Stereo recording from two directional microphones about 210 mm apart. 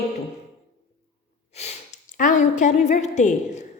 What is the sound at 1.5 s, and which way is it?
A woman's voice, 30° left (ahead or behind).